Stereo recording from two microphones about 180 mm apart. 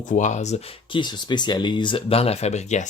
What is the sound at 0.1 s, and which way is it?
Speech, 40° left (ahead or behind).